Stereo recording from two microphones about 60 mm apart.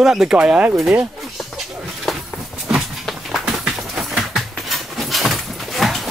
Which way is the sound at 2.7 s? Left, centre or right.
Centre.